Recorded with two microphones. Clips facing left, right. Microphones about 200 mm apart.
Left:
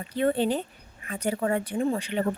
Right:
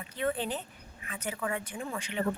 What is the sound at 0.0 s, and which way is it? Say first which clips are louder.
Speech: left 8 dB; 35° left (ahead or behind).